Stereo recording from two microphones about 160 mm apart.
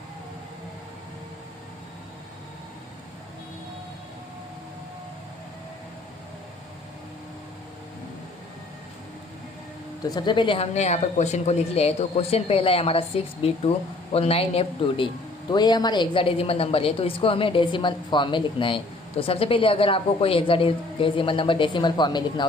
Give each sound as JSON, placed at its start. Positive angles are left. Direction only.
{"t": 10.0, "sound": "a man's voice", "side_deg": 25}